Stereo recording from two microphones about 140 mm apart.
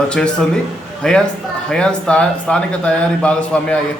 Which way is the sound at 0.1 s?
5° left (ahead or behind).